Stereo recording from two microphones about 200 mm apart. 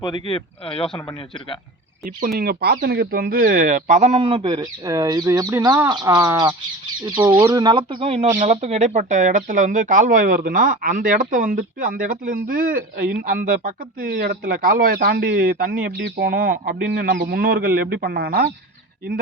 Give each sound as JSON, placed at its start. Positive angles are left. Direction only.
{"t": 0.0, "sound": "speech", "side_deg": 25}
{"t": 2.0, "sound": "speech", "side_deg": -45}
{"t": 16.0, "sound": "speech", "side_deg": -55}